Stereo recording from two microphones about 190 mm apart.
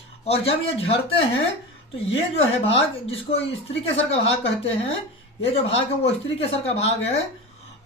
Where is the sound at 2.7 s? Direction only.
30° left (ahead or behind).